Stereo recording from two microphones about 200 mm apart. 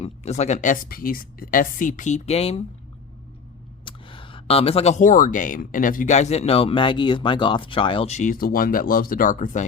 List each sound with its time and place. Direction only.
0.0 s speech: 35° left (ahead or behind)
3.8 s speech: 25° left (ahead or behind)